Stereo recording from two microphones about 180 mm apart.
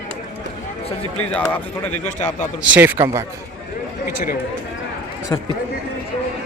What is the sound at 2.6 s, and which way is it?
Speech, 10° right (ahead or behind).